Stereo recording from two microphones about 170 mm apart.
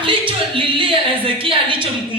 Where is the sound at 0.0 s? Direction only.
30° right (ahead or behind).